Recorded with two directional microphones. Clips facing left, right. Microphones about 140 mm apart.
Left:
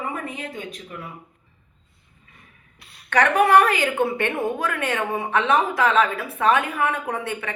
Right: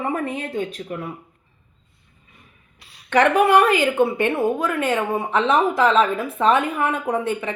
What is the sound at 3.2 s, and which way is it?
Speech, 15° right (ahead or behind).